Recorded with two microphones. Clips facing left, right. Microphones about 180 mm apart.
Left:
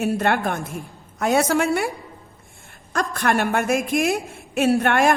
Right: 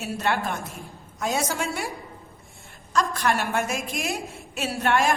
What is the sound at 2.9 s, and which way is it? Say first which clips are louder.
A woman's voice: left 2 dB; 55° left (ahead or behind).